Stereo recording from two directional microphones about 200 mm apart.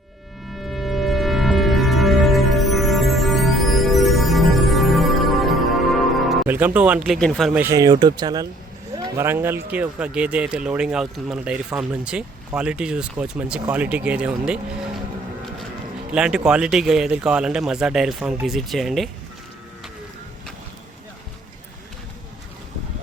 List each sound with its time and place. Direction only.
0.5 s music: centre (ahead or behind)
7.6 s speech: 15° right (ahead or behind)
16.1 s speech: 5° right (ahead or behind)